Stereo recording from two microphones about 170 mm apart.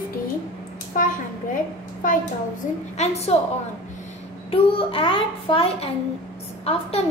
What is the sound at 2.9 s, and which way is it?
Speech, 40° left (ahead or behind).